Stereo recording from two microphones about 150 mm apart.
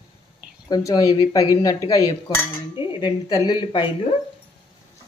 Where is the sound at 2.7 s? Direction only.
30° left (ahead or behind).